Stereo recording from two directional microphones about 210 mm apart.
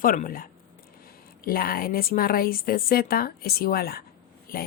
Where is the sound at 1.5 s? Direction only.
45° left (ahead or behind).